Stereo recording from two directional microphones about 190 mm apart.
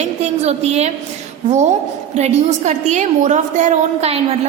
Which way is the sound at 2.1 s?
35° right (ahead or behind).